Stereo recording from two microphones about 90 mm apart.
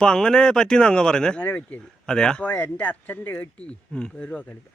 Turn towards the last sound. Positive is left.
turn(degrees=15)  # may be behind; listen again after turning